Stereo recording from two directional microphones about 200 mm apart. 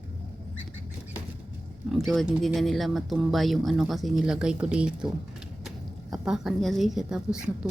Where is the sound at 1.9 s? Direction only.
Centre (ahead or behind).